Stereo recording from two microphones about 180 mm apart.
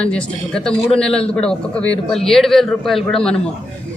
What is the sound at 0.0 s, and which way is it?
Speech, 5° left (ahead or behind).